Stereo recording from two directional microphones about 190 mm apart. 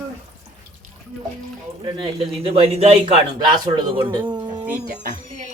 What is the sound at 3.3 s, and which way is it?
Speech, 20° right (ahead or behind).